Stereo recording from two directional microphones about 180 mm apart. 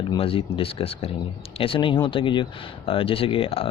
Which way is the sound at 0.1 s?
30° left (ahead or behind).